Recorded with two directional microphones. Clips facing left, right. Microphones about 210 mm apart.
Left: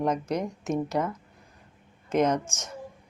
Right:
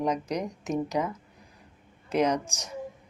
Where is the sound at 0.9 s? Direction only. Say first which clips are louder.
Left 1 dB; 5° right (ahead or behind).